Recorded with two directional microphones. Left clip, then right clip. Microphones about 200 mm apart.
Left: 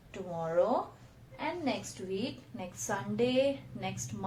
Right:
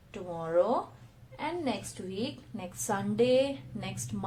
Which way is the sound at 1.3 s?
40° right (ahead or behind).